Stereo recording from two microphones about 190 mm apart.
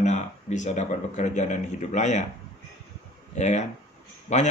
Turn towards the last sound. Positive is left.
turn(degrees=40)  # may be behind; listen again after turning